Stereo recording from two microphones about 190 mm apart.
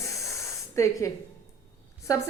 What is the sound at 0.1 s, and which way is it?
Spray, 15° left (ahead or behind).